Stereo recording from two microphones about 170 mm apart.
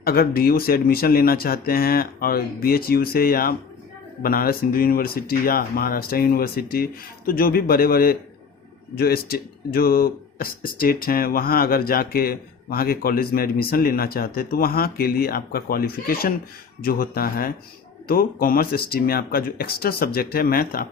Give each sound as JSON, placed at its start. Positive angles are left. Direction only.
{"t": 0.0, "sound": "speech", "side_deg": 60}